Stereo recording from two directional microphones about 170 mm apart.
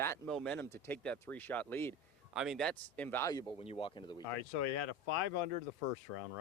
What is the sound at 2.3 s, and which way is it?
Speech, centre (ahead or behind).